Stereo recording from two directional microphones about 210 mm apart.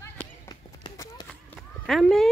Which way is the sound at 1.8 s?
Centre (ahead or behind).